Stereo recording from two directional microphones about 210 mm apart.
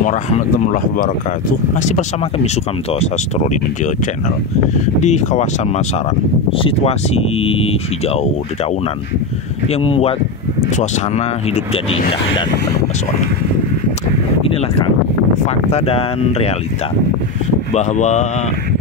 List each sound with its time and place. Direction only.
0.7 s speech: 40° left (ahead or behind)
5.0 s speech: 35° left (ahead or behind)
6.6 s speech: 30° left (ahead or behind)
9.7 s speech: 30° left (ahead or behind)
15.4 s speech: 30° left (ahead or behind)
17.7 s speech: 35° left (ahead or behind)